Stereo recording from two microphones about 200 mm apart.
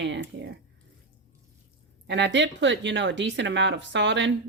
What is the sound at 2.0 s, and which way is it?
Speech, 60° right (ahead or behind).